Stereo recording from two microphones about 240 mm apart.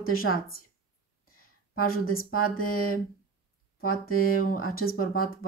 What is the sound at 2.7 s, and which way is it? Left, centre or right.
Speech, left.